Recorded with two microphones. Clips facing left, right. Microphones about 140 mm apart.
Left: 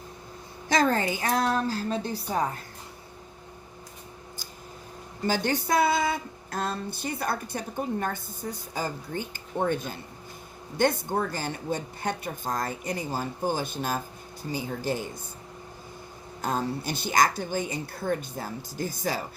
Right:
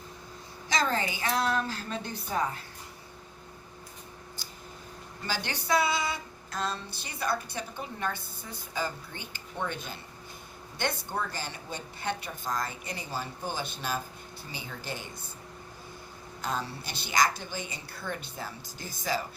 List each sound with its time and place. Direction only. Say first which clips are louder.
0.7 s a woman's voice: left 5 dB; 50° left (ahead or behind)
5.2 s speech: left 9 dB; 45° left (ahead or behind)
16.4 s speech: left 6 dB; 45° left (ahead or behind)